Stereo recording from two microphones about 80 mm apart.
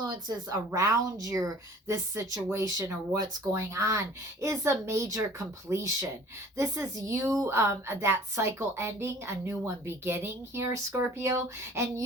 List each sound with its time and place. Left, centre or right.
0.0 s a woman's voice: right